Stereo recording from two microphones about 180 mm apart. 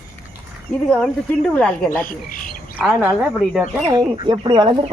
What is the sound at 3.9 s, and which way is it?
Speech, 25° right (ahead or behind).